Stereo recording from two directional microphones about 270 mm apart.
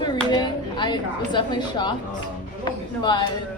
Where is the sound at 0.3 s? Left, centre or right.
Centre.